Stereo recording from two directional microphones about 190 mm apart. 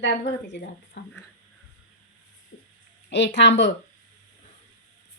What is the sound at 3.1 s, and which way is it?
Speech, 70° left (ahead or behind).